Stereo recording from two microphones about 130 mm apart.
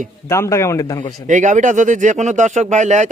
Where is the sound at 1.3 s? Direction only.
75° right (ahead or behind).